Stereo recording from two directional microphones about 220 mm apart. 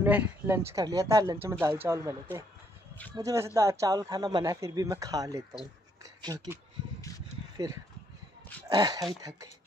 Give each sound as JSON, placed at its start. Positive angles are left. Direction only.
{"t": 0.0, "sound": "speech", "side_deg": -10}
{"t": 3.2, "sound": "speech", "side_deg": -15}